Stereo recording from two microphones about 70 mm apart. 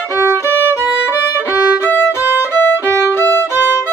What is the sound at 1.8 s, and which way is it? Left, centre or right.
Music, left.